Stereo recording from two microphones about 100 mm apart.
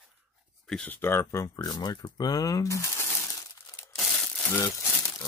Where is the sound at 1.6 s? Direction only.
40° left (ahead or behind).